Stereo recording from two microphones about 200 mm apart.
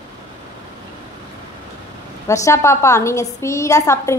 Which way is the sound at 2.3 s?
15° left (ahead or behind).